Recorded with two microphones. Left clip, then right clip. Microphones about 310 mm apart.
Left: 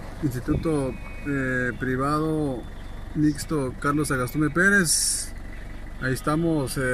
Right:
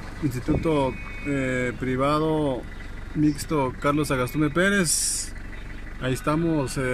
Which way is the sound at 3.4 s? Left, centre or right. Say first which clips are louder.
Right 2 dB; centre.